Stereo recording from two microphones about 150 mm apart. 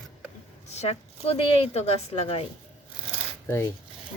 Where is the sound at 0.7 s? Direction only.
45° left (ahead or behind).